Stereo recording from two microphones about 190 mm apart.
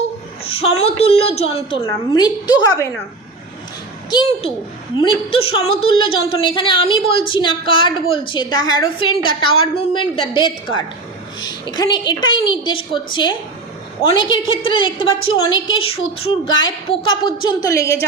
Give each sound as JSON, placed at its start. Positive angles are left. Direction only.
{"t": 0.5, "sound": "a woman's voice", "side_deg": 30}
{"t": 4.9, "sound": "a woman's voice", "side_deg": 25}
{"t": 6.1, "sound": "a woman's voice", "side_deg": 90}
{"t": 6.4, "sound": "a woman's voice", "side_deg": 25}